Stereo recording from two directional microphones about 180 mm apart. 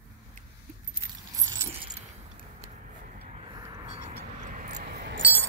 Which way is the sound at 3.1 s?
35° right (ahead or behind).